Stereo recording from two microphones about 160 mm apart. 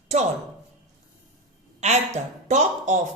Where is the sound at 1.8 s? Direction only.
45° right (ahead or behind).